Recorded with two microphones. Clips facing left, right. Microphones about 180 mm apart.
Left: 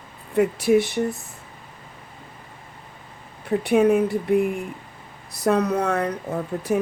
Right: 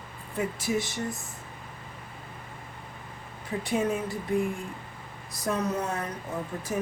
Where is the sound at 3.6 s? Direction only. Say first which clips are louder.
Left 10 dB; 60° left (ahead or behind).